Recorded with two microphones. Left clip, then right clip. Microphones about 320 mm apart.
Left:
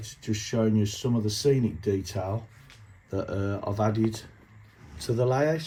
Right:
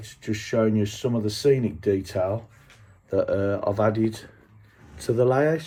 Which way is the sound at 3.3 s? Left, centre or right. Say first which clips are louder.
Right 8 dB; centre.